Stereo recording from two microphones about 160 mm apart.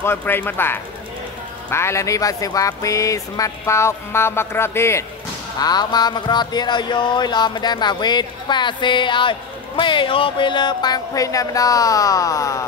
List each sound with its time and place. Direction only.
0.0 s speech: 15° left (ahead or behind)
5.6 s music: 25° left (ahead or behind)